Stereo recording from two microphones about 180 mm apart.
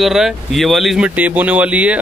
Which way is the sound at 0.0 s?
Centre (ahead or behind).